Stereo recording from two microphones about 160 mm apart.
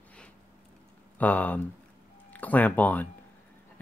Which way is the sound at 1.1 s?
10° left (ahead or behind).